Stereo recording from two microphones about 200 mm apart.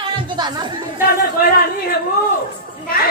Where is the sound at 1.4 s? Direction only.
50° left (ahead or behind).